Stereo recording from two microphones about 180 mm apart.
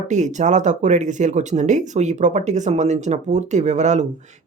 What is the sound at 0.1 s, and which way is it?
Speech, 40° right (ahead or behind).